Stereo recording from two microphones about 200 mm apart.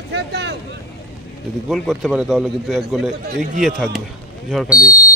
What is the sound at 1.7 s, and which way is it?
A man's voice, centre (ahead or behind).